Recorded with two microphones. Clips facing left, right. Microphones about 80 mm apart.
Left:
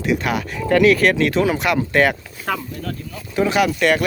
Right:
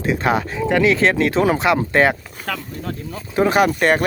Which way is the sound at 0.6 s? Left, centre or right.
Centre.